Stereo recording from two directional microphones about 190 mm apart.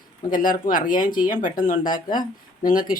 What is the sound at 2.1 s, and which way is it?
Speech, 20° left (ahead or behind).